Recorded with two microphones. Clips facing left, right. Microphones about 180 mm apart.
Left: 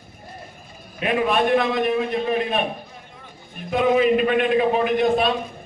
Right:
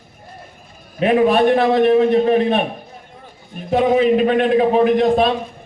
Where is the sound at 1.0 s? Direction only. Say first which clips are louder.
Right 7 dB; 35° right (ahead or behind).